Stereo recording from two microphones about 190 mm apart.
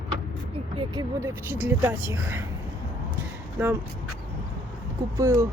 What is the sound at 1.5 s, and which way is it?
Speech, 10° right (ahead or behind).